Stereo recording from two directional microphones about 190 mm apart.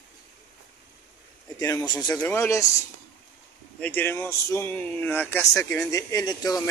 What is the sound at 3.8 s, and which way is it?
Speech, 10° left (ahead or behind).